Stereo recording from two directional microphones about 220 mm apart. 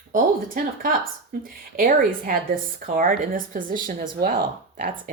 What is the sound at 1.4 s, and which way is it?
Speech, 40° right (ahead or behind).